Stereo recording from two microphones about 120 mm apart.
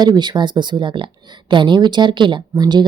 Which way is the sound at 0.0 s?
35° right (ahead or behind).